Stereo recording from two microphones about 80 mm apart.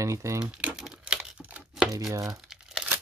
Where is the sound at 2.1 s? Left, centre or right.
Right.